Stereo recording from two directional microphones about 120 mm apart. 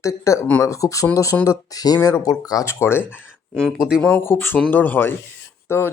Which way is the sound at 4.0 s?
10° left (ahead or behind).